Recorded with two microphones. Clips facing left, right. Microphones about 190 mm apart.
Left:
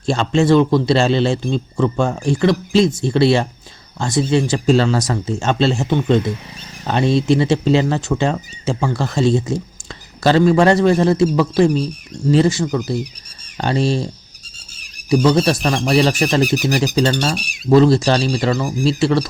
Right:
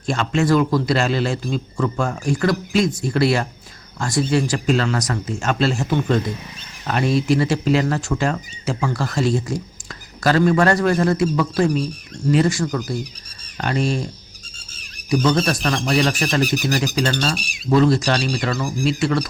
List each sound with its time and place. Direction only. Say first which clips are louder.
0.0 s speech: left 4 dB; 30° left (ahead or behind)
15.1 s speech: left 4 dB; 30° left (ahead or behind)